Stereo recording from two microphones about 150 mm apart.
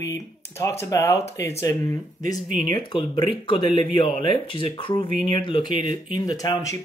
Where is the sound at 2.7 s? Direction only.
30° left (ahead or behind).